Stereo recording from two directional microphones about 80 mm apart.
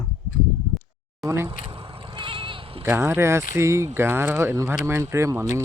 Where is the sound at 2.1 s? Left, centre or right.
Right.